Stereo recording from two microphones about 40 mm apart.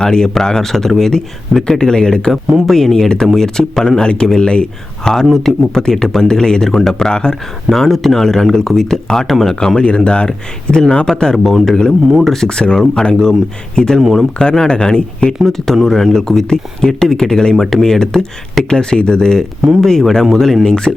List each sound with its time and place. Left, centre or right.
0.0 s speech: centre
2.3 s speech: centre; by 5.1 s left
5.2 s speech: centre; by 7.3 s left
7.7 s speech: centre
9.8 s speech: left
17.5 s speech: centre
18.0 s speech: centre
20.7 s speech: centre